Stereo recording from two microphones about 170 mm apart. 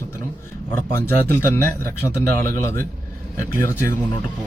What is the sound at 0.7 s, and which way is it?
A man's voice, 15° left (ahead or behind).